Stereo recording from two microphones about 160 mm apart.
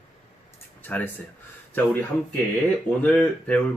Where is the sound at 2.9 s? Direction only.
30° right (ahead or behind).